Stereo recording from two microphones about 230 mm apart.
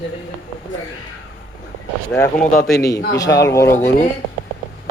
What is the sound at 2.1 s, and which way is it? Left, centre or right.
A man's voice, centre.